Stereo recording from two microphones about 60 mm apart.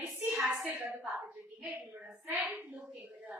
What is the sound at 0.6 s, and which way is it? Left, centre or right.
Child singing, right.